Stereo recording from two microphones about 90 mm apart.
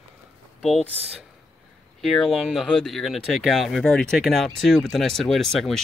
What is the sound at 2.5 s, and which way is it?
Speech, centre (ahead or behind).